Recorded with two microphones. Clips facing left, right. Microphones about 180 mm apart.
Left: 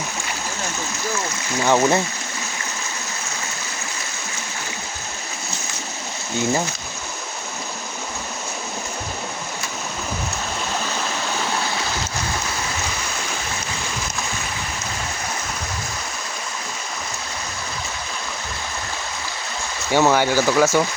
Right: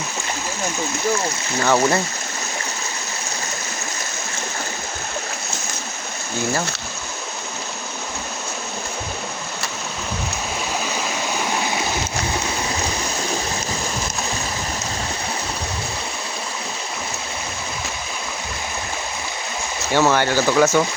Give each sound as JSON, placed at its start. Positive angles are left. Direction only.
{"t": 1.6, "sound": "speech", "side_deg": 15}
{"t": 11.6, "sound": "stream", "side_deg": -15}
{"t": 19.9, "sound": "speech", "side_deg": 15}